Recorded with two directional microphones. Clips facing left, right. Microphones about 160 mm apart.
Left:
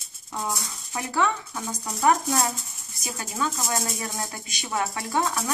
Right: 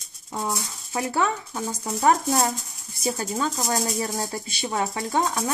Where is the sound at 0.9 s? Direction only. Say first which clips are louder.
Right 1 dB; 25° right (ahead or behind).